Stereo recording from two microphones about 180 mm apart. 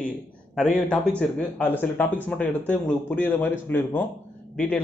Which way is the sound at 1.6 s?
10° left (ahead or behind).